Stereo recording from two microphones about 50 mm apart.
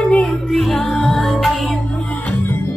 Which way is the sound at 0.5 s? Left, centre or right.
Centre.